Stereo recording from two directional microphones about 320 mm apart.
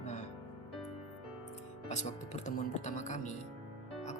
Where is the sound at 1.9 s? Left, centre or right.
Left.